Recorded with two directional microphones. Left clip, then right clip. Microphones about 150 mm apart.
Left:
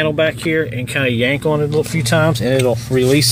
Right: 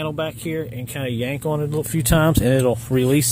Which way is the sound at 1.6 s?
45° right (ahead or behind).